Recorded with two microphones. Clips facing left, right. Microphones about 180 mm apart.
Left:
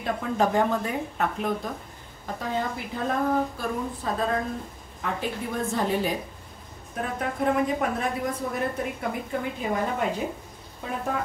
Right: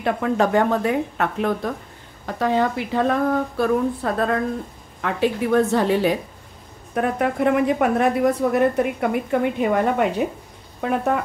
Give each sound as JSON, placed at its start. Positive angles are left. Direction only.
{"t": 0.0, "sound": "a woman's voice", "side_deg": -70}
{"t": 5.0, "sound": "a woman's voice", "side_deg": -80}